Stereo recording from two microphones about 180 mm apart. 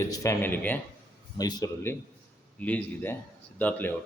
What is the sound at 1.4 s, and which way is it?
A man's voice, 20° left (ahead or behind).